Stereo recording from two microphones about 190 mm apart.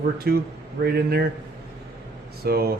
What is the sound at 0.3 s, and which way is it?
Speech, 55° right (ahead or behind).